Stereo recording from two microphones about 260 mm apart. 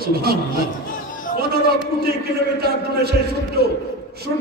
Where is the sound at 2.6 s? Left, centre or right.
Right.